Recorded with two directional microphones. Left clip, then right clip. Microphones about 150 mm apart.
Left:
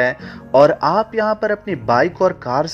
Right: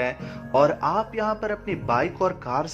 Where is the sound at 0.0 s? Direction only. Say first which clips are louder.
Left 9 dB; 40° left (ahead or behind).